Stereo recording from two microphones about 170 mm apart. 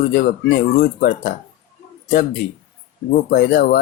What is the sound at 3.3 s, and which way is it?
Speech, 65° left (ahead or behind).